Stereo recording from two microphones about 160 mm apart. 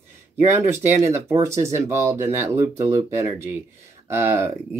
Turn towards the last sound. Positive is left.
turn(degrees=-15)  # may be behind; listen again after turning